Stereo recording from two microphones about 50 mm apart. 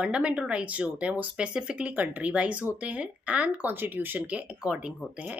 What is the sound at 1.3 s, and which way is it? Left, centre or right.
Speech, centre.